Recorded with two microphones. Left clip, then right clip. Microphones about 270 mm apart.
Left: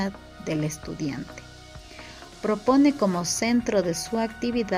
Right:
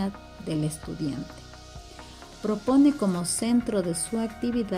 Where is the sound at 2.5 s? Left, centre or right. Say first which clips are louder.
Left 2 dB; left.